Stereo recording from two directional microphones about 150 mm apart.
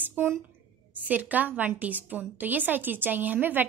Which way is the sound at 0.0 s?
15° right (ahead or behind).